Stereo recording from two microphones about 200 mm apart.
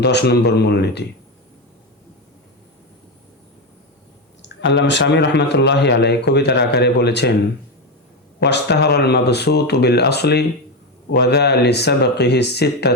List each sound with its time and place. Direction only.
0.0 s a man's voice: 55° left (ahead or behind)
4.4 s a man's voice: 65° left (ahead or behind)
8.4 s a man's voice: 60° left (ahead or behind)